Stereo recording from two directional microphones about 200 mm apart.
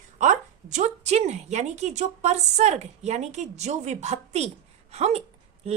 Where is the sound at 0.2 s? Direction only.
40° right (ahead or behind).